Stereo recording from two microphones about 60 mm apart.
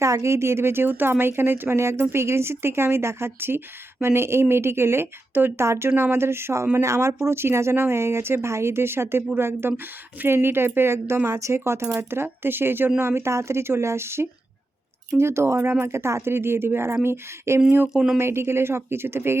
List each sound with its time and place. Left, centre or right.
0.0 s speech: right
5.6 s speech: right
11.3 s speech: right
17.8 s speech: centre
18.2 s speech: right